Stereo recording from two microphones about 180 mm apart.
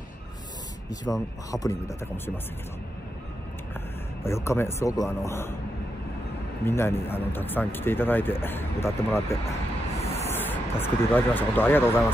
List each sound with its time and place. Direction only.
1.5 s a man's voice: 20° left (ahead or behind)
4.2 s a man's voice: 15° left (ahead or behind)
6.6 s a man's voice: 15° left (ahead or behind)